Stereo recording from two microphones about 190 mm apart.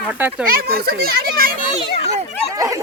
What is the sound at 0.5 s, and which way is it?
Speech, 55° right (ahead or behind).